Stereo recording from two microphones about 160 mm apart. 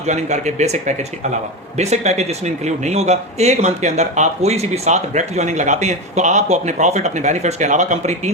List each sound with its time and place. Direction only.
0.0 s a man's voice: 45° right (ahead or behind)